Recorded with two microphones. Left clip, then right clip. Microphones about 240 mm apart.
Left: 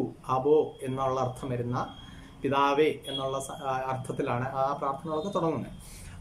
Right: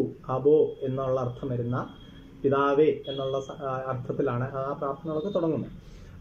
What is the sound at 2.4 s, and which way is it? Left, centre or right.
Speech, centre.